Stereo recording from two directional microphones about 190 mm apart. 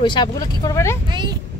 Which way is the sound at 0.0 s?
25° left (ahead or behind).